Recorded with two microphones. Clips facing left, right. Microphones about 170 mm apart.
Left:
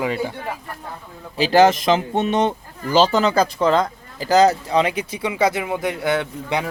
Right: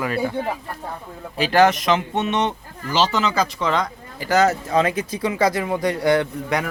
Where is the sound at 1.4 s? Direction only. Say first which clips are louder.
Left 2 dB; 25° left (ahead or behind).